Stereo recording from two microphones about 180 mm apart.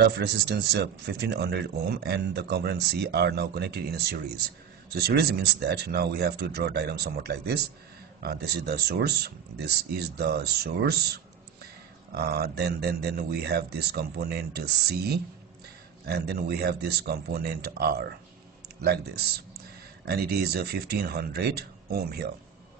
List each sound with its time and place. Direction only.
0.0 s speech: 65° right (ahead or behind)